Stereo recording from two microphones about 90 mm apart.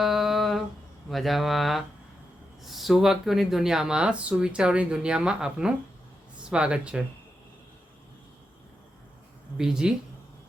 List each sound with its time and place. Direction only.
0.0 s a sound: 5° right (ahead or behind)
1.1 s speech: centre (ahead or behind)
9.6 s speech: 5° right (ahead or behind)